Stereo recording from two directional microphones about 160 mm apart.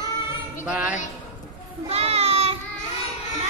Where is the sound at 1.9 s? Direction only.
40° right (ahead or behind).